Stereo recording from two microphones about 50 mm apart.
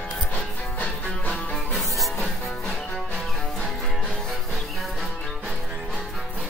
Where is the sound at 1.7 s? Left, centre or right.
Centre.